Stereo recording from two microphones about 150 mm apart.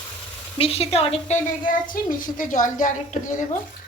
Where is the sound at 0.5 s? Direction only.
40° left (ahead or behind).